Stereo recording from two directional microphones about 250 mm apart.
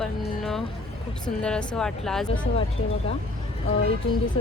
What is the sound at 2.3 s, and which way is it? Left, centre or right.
Speech, left.